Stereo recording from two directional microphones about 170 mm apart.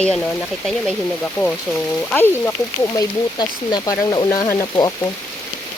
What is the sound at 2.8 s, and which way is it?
Speech, 25° left (ahead or behind).